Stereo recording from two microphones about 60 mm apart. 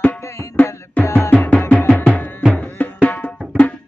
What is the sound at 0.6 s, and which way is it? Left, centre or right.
Music, left.